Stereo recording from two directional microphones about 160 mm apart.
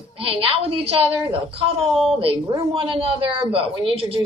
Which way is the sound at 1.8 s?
Centre (ahead or behind).